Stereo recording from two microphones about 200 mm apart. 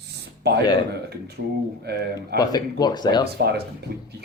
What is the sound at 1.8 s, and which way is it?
Speech, 55° right (ahead or behind).